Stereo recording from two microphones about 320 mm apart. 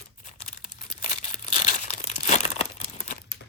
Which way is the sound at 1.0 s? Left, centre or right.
Left.